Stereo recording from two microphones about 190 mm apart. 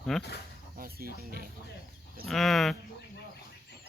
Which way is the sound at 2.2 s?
Centre (ahead or behind).